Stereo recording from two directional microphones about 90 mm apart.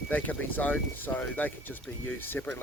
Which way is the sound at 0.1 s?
20° left (ahead or behind).